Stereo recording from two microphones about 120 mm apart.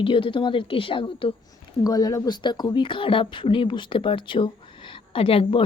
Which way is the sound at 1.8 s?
30° left (ahead or behind).